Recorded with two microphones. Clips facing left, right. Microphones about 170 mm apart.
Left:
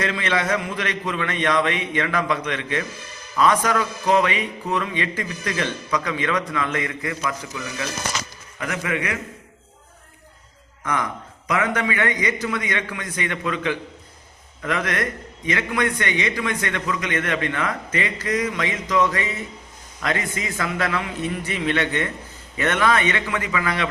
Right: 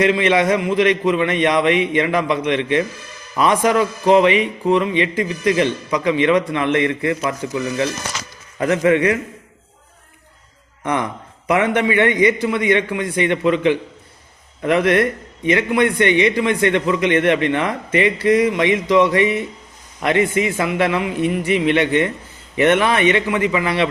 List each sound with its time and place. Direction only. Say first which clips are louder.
0.0 s a man's voice: right 8 dB; 20° right (ahead or behind)
10.8 s speech: right 4 dB; 25° right (ahead or behind)